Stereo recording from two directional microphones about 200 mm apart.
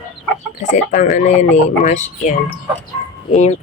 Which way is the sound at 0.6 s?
40° left (ahead or behind).